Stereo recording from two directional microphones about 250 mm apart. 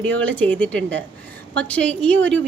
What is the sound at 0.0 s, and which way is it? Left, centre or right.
A woman's voice, centre.